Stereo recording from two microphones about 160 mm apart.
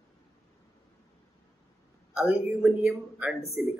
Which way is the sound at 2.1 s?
5° right (ahead or behind).